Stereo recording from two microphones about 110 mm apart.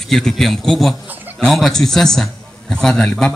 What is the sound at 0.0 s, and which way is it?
Speech, 5° left (ahead or behind).